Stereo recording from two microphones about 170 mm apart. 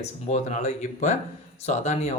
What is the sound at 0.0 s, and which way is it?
Speech, 45° left (ahead or behind).